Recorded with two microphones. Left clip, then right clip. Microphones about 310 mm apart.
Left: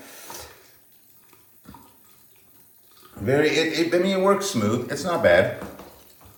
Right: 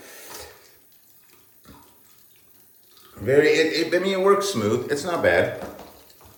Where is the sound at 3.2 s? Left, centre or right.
Centre.